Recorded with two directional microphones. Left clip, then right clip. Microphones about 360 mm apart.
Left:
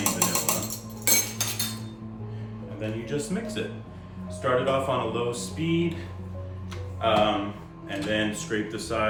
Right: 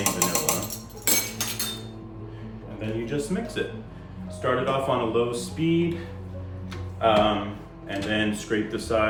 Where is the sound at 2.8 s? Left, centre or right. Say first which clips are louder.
Right 2 dB; centre.